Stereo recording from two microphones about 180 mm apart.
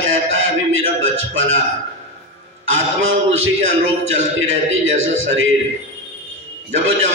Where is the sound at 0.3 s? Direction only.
90° right.